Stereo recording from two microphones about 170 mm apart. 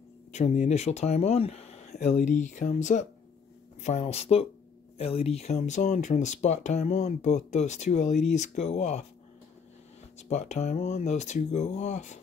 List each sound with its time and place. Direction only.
0.3 s speech: 40° left (ahead or behind)
10.1 s speech: 40° left (ahead or behind)